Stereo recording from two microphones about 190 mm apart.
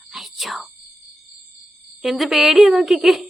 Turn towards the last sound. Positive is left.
turn(degrees=0)  # may be behind; listen again after turning